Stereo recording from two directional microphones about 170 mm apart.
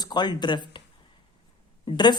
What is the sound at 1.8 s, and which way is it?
Speech, 25° left (ahead or behind).